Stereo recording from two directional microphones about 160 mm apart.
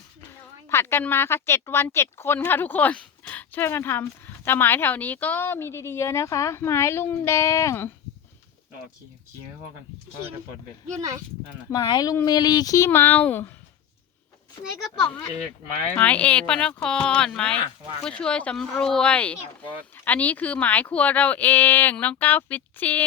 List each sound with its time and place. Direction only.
0.3 s a woman's voice: 15° left (ahead or behind)
11.7 s speech: 25° left (ahead or behind); by 13.5 s 10° left (ahead or behind)
16.0 s a woman's voice: 10° left (ahead or behind)